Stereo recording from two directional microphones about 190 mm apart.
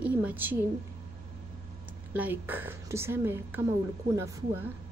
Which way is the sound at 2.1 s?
10° right (ahead or behind).